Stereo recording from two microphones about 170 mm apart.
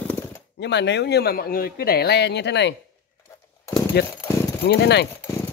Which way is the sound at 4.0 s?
70° left (ahead or behind).